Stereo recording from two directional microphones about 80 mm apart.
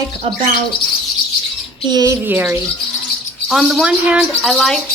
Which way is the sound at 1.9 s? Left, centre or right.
Right.